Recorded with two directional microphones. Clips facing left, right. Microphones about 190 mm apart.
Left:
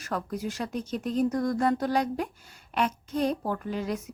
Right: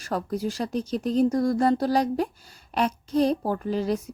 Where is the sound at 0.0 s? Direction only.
30° right (ahead or behind).